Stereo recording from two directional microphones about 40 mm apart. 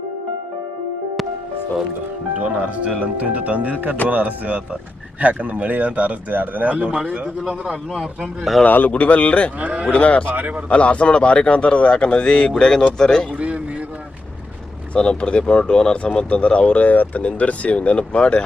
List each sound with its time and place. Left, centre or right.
2.4 s speech: right
7.0 s a man's voice: right
8.6 s speech: left
8.9 s a man's voice: left
9.6 s speech: right
9.9 s a man's voice: left
10.2 s speech: right
10.7 s speech: left; by 13.2 s centre
13.4 s a sound: right
14.9 s speech: left